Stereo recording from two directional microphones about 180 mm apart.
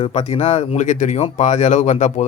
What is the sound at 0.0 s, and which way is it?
Speech, 35° left (ahead or behind).